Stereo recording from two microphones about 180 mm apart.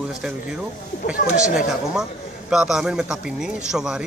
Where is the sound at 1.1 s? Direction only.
50° left (ahead or behind).